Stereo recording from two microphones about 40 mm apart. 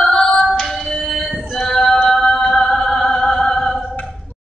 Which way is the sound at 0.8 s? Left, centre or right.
Centre.